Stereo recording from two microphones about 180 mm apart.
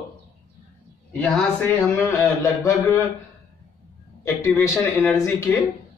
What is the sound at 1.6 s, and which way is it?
Speech, 15° left (ahead or behind).